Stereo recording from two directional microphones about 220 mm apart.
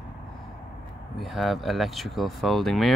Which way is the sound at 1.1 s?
Centre (ahead or behind).